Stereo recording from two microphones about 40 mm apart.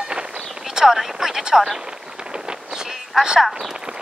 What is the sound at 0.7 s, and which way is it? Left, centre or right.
Speech, centre.